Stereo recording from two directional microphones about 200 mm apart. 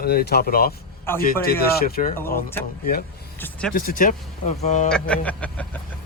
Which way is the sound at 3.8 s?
45° left (ahead or behind).